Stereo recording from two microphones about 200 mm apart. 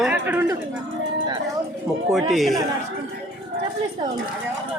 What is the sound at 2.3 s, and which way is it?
Speech, centre (ahead or behind).